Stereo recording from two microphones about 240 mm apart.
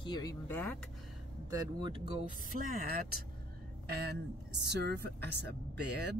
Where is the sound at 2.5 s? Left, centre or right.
Right.